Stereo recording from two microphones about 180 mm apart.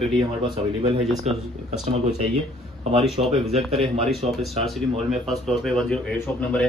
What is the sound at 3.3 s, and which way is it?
Speech, 35° right (ahead or behind).